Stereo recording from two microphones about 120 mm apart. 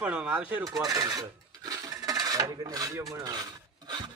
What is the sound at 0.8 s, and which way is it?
Filing, 30° right (ahead or behind).